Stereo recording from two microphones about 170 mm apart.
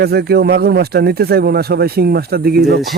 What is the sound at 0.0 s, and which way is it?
Speech, 70° right (ahead or behind).